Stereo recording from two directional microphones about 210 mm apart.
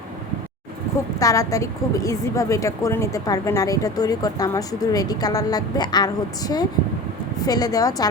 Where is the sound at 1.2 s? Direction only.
15° left (ahead or behind).